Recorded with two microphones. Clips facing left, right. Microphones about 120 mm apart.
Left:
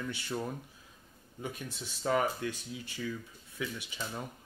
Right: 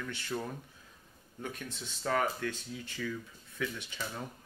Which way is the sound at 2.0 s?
15° left (ahead or behind).